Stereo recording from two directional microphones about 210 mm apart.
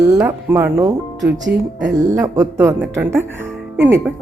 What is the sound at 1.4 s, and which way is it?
Speech, 60° right (ahead or behind).